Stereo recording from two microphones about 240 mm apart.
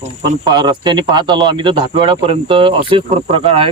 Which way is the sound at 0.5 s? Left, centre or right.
Centre.